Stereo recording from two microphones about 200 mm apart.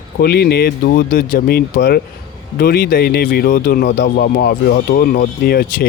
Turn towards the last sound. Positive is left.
turn(degrees=50)  # may be behind; listen again after turning